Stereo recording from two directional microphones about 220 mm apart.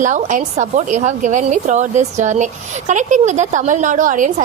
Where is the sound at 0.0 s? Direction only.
35° right (ahead or behind).